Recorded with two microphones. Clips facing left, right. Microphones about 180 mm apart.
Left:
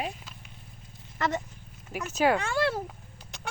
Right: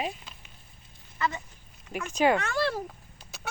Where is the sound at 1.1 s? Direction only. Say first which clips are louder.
Left 2 dB; 45° left (ahead or behind).